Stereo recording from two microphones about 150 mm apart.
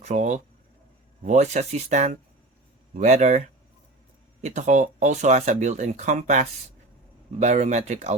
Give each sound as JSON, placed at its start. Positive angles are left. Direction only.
{"t": 0.0, "sound": "speech", "side_deg": -50}